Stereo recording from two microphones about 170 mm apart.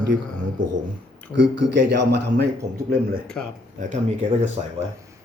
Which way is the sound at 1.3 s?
90° right.